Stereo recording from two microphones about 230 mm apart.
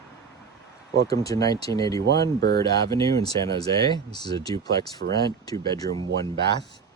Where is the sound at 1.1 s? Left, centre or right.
Centre.